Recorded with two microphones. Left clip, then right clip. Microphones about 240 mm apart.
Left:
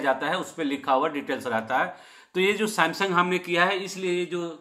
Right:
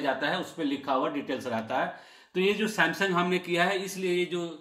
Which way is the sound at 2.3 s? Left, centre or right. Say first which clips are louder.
Left 3 dB; centre.